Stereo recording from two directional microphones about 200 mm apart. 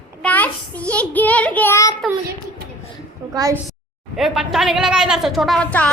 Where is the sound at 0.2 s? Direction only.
5° left (ahead or behind).